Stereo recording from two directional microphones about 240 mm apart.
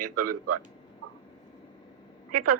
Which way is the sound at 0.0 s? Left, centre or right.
Right.